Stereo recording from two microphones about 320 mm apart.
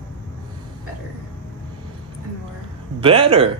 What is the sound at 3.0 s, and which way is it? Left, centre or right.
Speech, centre.